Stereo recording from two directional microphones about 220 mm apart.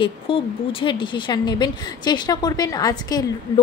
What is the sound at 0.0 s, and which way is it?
A woman's voice, 25° left (ahead or behind).